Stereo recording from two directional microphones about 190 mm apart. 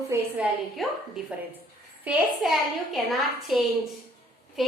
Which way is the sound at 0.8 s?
Centre (ahead or behind).